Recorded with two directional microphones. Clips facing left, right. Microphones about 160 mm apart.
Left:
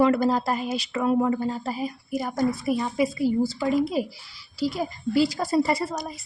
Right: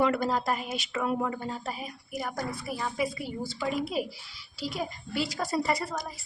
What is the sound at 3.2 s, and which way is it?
A woman's voice, 35° left (ahead or behind).